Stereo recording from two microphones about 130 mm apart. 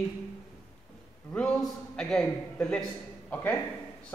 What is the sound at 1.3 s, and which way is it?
Speech, 5° left (ahead or behind).